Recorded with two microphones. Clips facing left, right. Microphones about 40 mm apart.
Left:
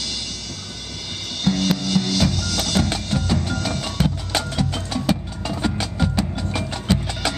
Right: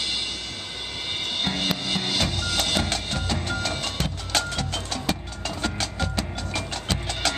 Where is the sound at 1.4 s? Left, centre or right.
Centre.